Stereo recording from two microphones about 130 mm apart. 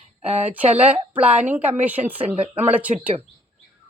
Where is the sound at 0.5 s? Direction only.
10° right (ahead or behind).